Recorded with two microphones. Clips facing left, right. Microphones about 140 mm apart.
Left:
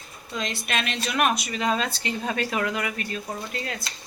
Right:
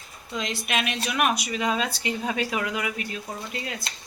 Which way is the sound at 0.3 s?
15° right (ahead or behind).